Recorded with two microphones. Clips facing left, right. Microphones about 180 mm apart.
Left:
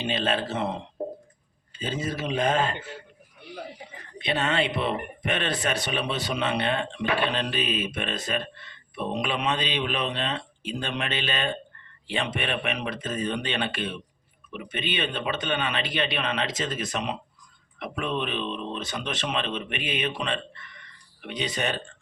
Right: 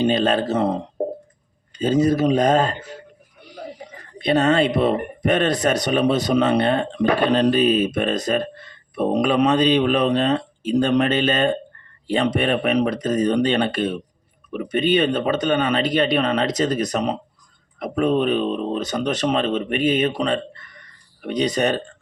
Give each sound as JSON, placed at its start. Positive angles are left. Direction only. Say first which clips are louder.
{"t": 0.0, "sound": "speech", "louder": "right 9 dB", "side_deg": -40}